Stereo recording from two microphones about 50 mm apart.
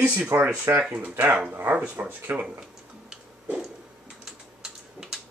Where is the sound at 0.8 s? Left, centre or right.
Right.